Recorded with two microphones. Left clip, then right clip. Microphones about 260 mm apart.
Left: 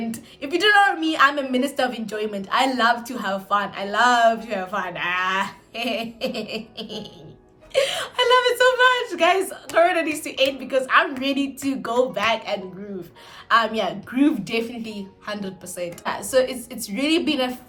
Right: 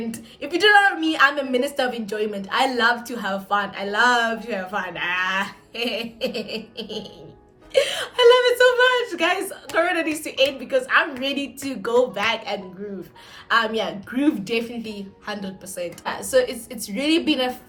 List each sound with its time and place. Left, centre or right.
0.1 s a woman's voice: centre